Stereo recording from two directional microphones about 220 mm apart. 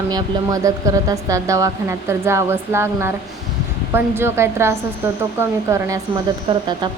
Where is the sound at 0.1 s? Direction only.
15° right (ahead or behind).